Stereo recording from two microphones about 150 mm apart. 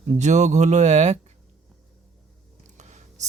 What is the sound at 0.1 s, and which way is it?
Speech, 50° right (ahead or behind).